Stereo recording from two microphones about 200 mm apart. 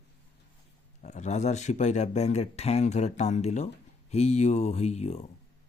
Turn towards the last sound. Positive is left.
turn(degrees=35)  # may be behind; listen again after turning